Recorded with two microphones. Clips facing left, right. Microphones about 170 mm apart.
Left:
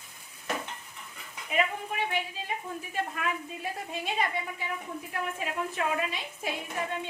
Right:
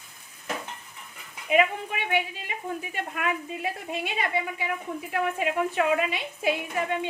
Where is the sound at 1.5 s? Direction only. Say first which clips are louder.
Right 6 dB; 75° right (ahead or behind).